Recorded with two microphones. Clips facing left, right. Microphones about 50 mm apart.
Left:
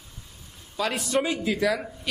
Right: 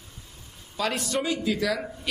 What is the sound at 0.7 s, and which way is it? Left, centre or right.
Speech, centre.